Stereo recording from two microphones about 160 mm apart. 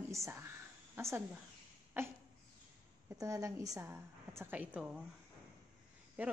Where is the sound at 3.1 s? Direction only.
20° right (ahead or behind).